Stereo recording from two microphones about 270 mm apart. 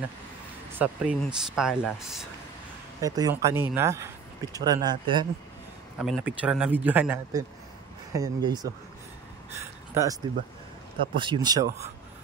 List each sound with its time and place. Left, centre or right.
0.7 s speech: centre
3.0 s speech: centre
5.9 s speech: centre
10.3 s speech: centre